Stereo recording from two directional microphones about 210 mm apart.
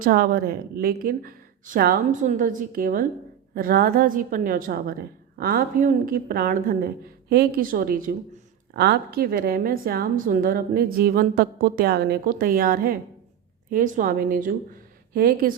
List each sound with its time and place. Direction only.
0.0 s a woman's voice: 45° right (ahead or behind)